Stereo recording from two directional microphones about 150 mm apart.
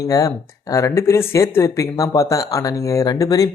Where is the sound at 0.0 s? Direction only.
20° left (ahead or behind).